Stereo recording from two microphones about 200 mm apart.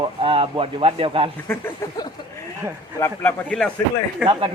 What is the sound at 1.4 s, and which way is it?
Speech, 15° left (ahead or behind).